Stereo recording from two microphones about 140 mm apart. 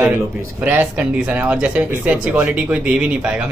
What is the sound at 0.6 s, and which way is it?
Speech, 10° right (ahead or behind).